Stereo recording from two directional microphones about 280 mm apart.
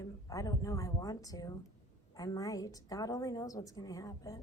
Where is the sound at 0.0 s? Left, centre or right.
Centre.